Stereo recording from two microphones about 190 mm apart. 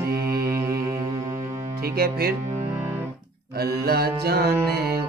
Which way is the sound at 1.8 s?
55° right (ahead or behind).